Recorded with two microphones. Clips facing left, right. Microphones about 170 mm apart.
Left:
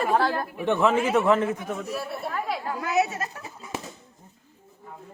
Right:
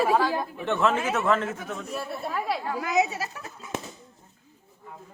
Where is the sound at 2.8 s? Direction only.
15° right (ahead or behind).